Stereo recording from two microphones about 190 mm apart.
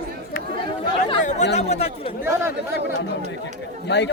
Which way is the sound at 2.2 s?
15° right (ahead or behind).